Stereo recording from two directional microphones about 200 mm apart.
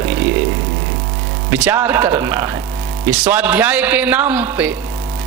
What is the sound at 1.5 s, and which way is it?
A man's voice, 10° right (ahead or behind).